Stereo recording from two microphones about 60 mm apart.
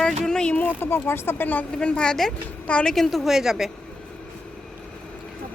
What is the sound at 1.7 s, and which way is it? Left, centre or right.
A woman's voice, centre.